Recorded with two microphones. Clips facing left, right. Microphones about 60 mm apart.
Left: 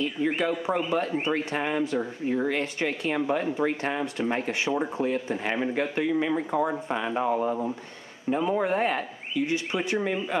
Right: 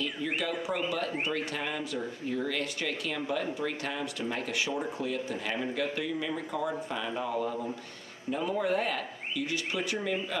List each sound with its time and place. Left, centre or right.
0.0 s speech: left